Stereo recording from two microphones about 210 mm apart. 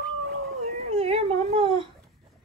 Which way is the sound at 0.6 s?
30° right (ahead or behind).